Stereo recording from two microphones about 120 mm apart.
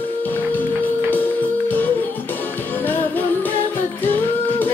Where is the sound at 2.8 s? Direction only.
15° left (ahead or behind).